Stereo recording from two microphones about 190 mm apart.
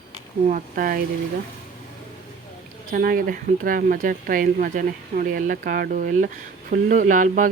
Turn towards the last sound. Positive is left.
turn(degrees=-45)  # may be behind; listen again after turning